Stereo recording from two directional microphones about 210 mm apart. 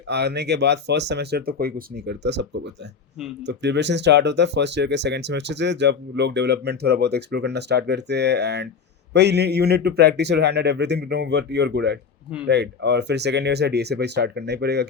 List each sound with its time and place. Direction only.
0.1 s a man's voice: 55° right (ahead or behind)